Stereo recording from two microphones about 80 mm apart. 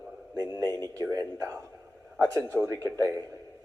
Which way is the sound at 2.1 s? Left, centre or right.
Centre.